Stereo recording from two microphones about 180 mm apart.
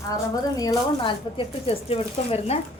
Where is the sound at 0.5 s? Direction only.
20° left (ahead or behind).